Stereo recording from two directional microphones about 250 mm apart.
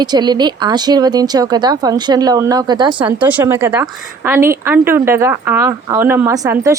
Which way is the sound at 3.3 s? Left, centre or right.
Centre.